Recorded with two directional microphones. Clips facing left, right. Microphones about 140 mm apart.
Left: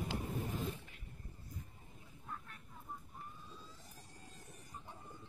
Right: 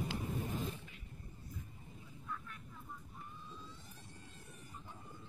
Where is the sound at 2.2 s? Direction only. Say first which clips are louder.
Right 2 dB; 40° left (ahead or behind).